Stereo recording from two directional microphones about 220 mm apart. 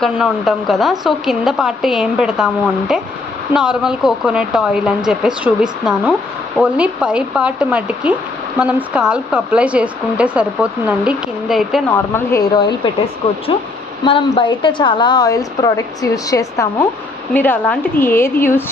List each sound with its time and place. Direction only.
0.0 s speech: centre (ahead or behind)
11.9 s a woman's voice: 10° left (ahead or behind)